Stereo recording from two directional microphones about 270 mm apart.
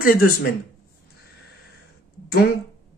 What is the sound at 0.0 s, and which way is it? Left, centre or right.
Speech, left.